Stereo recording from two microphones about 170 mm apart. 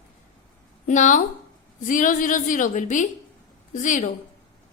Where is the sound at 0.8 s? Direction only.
50° left (ahead or behind).